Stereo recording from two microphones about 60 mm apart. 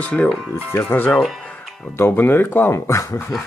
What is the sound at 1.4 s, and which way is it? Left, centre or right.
Music, left.